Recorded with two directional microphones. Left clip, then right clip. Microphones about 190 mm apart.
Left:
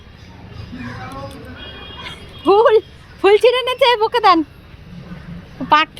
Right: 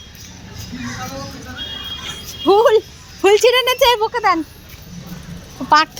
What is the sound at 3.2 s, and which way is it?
Speech, 10° right (ahead or behind).